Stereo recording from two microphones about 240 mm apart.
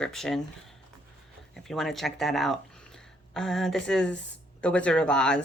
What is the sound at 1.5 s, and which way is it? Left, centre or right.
Speech, centre.